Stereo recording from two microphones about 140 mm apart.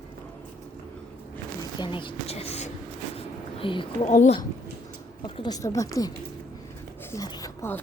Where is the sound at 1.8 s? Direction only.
35° left (ahead or behind).